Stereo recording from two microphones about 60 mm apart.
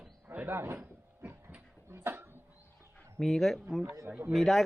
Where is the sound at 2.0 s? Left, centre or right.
Right.